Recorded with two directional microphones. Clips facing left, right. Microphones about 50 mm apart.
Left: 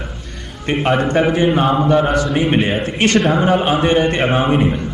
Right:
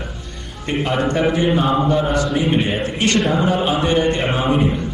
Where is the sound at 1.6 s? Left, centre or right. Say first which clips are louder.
Left 3 dB; left.